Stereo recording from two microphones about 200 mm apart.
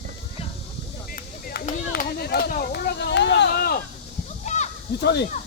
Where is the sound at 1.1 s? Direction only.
45° left (ahead or behind).